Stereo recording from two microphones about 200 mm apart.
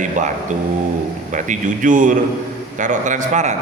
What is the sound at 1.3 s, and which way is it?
Speech, 40° right (ahead or behind).